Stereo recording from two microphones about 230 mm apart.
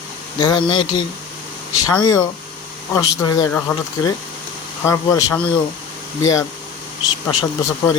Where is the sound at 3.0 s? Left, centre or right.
Centre.